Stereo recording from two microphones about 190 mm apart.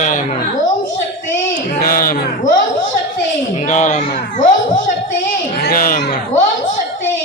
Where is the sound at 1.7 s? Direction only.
50° left (ahead or behind).